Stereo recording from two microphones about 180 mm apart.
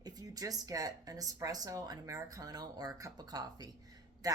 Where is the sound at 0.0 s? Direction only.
20° right (ahead or behind).